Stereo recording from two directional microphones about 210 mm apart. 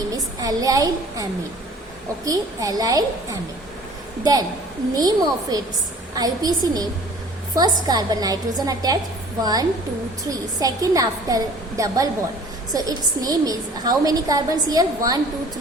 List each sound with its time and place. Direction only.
0.1 s a woman's voice: 15° right (ahead or behind)
7.9 s a woman's voice: 20° right (ahead or behind)